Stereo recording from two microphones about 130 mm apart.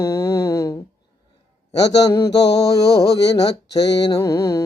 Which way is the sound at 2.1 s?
25° left (ahead or behind).